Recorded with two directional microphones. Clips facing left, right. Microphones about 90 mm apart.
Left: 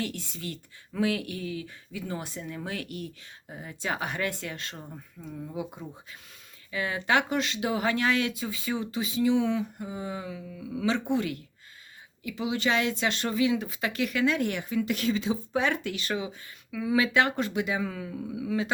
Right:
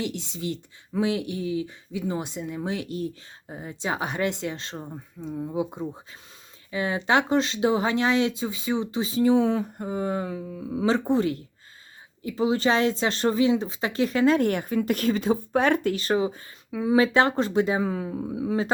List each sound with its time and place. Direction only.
0.0 s speech: 20° right (ahead or behind)